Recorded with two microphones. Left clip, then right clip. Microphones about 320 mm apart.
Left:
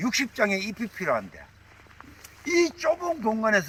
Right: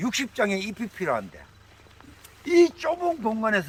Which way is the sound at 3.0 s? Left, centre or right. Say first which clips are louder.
Even; centre.